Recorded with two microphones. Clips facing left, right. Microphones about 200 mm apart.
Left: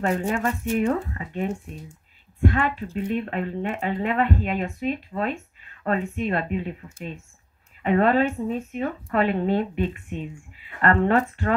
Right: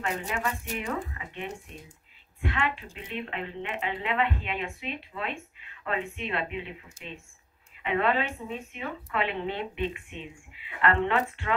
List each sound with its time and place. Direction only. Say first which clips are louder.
0.0 s speech: left 8 dB; 40° left (ahead or behind)